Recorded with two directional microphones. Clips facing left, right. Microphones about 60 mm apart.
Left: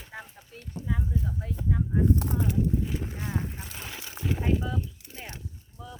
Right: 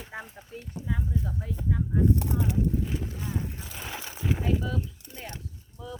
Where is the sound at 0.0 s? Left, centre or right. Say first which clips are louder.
Right 3 dB; centre.